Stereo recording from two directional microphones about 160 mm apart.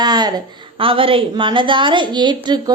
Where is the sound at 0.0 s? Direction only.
25° right (ahead or behind).